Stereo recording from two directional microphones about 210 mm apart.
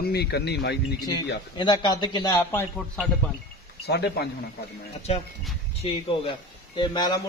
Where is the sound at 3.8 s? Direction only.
50° left (ahead or behind).